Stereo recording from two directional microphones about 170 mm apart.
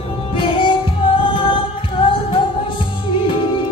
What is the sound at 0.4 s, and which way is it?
Music, 30° left (ahead or behind).